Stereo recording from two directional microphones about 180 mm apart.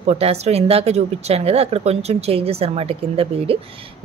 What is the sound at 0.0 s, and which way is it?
A woman's voice, 35° right (ahead or behind).